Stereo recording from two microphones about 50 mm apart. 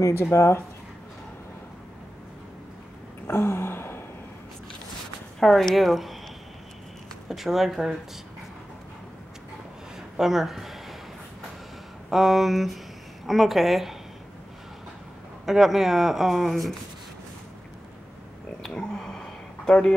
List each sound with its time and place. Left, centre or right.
0.0 s speech: left
3.3 s gasp: left
5.4 s speech: centre
7.2 s speech: centre
9.9 s a sound: centre
12.1 s speech: centre
15.4 s speech: centre
18.8 s a sound: centre